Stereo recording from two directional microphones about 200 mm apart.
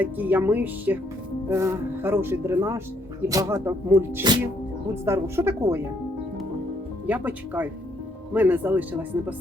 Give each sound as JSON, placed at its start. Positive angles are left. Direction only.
{"t": 0.0, "sound": "speech", "side_deg": -10}
{"t": 7.1, "sound": "speech", "side_deg": -10}